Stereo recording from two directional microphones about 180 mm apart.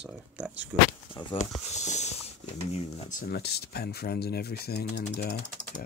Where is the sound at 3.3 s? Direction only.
65° left (ahead or behind).